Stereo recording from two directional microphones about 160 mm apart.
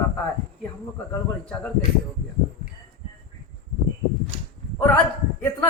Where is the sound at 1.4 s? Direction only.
5° left (ahead or behind).